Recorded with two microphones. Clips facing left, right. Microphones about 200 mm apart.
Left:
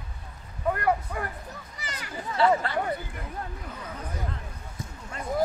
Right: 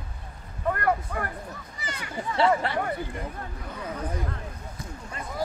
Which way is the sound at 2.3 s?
25° right (ahead or behind).